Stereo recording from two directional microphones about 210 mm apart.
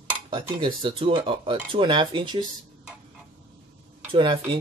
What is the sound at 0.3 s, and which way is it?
Speech, 25° right (ahead or behind).